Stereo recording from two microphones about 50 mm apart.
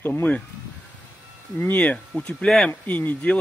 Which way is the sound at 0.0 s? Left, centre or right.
Left.